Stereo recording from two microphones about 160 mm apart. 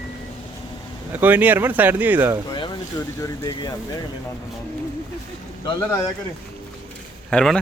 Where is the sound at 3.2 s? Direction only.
25° left (ahead or behind).